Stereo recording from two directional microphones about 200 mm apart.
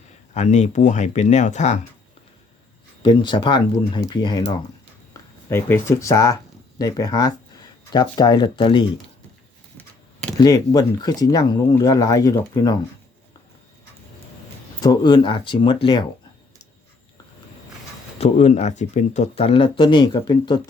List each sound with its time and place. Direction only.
0.3 s speech: 35° left (ahead or behind)
3.0 s speech: 25° left (ahead or behind)
9.7 s a sound: 5° left (ahead or behind)
10.3 s speech: 20° left (ahead or behind)
14.8 s speech: 20° left (ahead or behind)
18.2 s speech: 35° left (ahead or behind)